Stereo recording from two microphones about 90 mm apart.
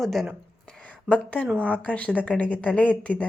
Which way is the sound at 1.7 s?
15° left (ahead or behind).